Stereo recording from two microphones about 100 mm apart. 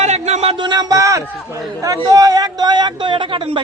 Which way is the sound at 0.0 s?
90° right.